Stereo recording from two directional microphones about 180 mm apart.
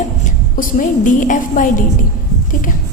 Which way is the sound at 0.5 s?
50° left (ahead or behind).